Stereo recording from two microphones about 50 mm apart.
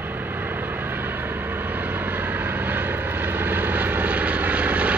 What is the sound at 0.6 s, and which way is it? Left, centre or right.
Vehicle, right.